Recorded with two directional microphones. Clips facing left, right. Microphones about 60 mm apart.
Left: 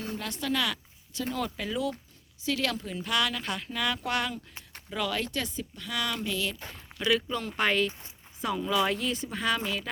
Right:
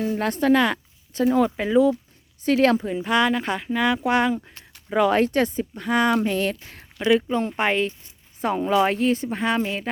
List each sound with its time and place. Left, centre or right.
0.2 s speech: right
2.4 s speech: right
7.0 s speech: right
8.4 s speech: right